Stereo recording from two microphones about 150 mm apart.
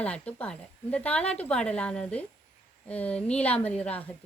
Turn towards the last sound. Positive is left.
turn(degrees=10)  # may be behind; listen again after turning